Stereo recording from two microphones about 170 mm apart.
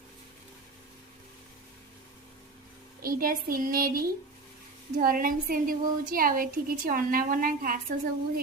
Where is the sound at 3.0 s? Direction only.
55° right (ahead or behind).